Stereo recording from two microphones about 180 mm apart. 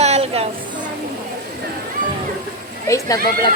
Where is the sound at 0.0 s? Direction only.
35° right (ahead or behind).